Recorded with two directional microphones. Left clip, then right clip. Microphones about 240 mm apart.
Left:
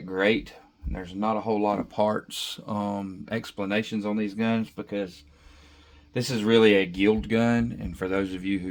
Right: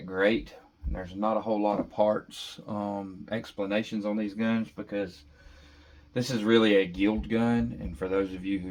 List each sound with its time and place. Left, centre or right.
0.1 s speech: left
6.1 s speech: left